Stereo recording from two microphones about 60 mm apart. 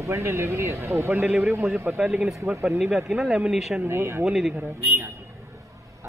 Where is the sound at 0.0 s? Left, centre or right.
Right.